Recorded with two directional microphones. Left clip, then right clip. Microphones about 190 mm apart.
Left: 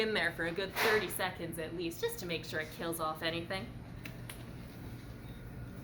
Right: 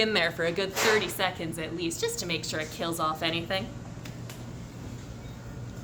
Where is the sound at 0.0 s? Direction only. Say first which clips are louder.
Right 7 dB; 45° right (ahead or behind).